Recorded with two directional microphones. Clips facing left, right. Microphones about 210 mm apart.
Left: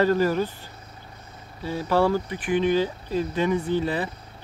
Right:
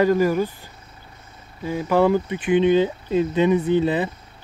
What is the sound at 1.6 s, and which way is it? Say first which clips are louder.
Speech: right 3 dB; 15° right (ahead or behind).